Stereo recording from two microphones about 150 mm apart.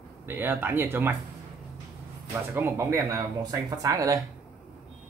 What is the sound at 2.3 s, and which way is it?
Speech, 15° right (ahead or behind).